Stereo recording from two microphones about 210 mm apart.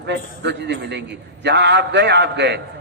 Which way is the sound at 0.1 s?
55° right (ahead or behind).